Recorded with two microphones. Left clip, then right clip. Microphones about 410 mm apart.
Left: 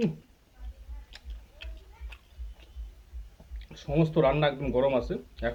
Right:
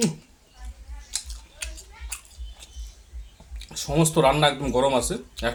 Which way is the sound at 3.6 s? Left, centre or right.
Left.